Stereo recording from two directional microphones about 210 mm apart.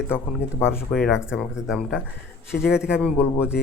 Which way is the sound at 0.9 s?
Centre (ahead or behind).